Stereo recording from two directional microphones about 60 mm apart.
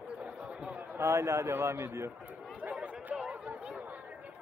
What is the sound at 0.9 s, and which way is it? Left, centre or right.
A man's voice, right.